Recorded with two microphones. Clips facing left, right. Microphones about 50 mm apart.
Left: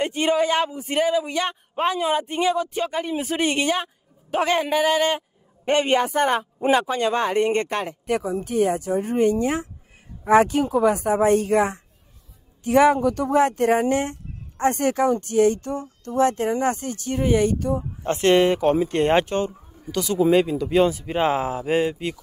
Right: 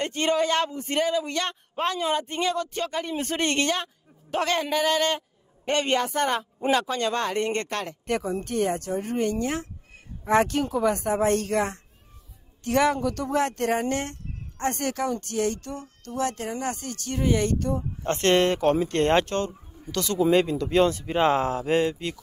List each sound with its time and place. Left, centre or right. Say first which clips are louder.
0.0 s speech: left 3 dB; centre
8.1 s speech: left 3 dB; centre